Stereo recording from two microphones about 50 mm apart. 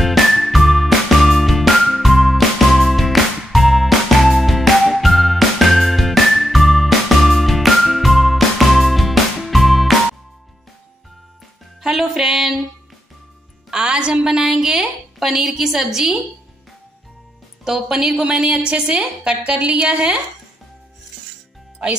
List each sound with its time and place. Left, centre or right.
0.0 s music: centre
11.8 s music: centre
13.7 s music: centre
14.5 s a sound: centre
17.6 s a woman's voice: centre
21.8 s a woman's voice: centre